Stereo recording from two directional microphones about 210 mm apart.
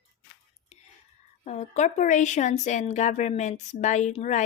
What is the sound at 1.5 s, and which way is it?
A woman's voice, 30° left (ahead or behind).